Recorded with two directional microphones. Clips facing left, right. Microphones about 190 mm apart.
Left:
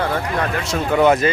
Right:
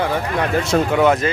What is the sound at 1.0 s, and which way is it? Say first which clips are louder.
Speech: left 4 dB; centre (ahead or behind).